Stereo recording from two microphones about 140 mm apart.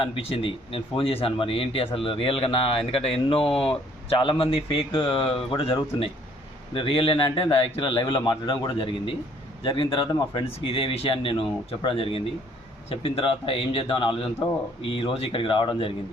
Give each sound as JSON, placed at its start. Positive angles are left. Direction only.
{"t": 0.0, "sound": "speech", "side_deg": 40}